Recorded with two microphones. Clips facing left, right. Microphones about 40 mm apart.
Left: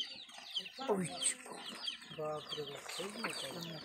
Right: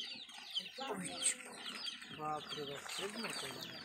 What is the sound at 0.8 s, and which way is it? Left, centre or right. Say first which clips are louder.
Speech: left 11 dB; centre.